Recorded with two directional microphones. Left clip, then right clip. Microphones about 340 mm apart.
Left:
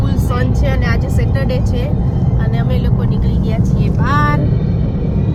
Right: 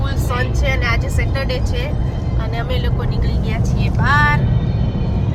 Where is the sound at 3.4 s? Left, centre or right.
Centre.